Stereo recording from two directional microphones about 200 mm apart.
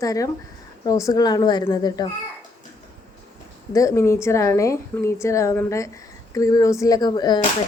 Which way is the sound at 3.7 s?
15° left (ahead or behind).